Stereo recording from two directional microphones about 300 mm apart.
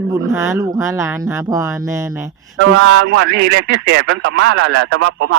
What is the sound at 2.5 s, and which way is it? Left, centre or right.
Speech, right.